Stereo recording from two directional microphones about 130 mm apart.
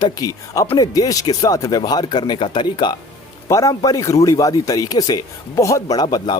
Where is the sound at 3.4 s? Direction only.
25° left (ahead or behind).